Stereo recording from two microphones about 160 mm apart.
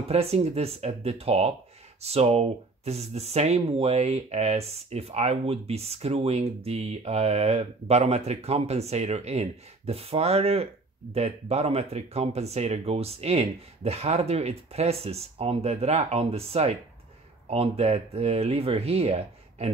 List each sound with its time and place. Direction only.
0.1 s speech: 40° right (ahead or behind)